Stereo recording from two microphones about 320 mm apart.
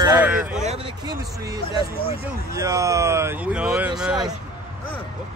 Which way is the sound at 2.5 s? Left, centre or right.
Centre.